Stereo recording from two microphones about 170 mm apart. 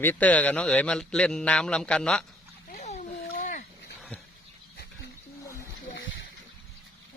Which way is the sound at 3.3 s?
50° left (ahead or behind).